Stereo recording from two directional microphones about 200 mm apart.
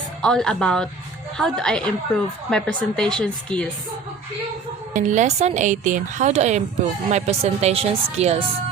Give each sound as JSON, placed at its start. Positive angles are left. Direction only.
{"t": 0.2, "sound": "a woman's voice", "side_deg": 5}
{"t": 4.9, "sound": "a woman's voice", "side_deg": -40}